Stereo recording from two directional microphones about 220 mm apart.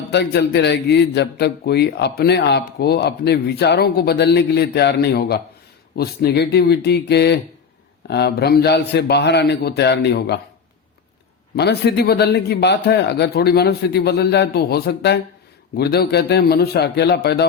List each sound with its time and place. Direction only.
0.1 s a man's voice: 50° left (ahead or behind)
11.5 s a man's voice: 50° left (ahead or behind)